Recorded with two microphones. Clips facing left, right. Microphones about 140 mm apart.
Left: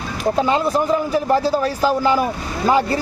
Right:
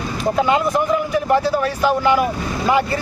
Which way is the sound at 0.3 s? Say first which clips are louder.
Right 1 dB; 30° left (ahead or behind).